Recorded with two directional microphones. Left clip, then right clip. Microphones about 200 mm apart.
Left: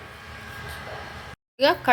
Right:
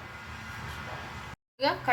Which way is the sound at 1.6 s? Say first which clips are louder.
Left 8 dB; 50° left (ahead or behind).